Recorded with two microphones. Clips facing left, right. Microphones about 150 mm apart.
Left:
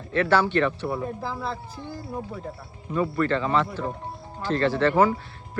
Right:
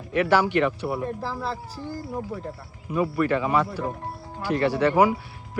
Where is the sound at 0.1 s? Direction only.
15° right (ahead or behind).